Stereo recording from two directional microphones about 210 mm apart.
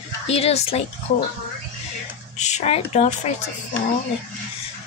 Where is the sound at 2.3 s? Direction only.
35° left (ahead or behind).